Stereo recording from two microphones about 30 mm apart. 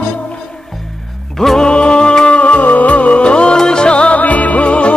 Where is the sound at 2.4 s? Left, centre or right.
Left.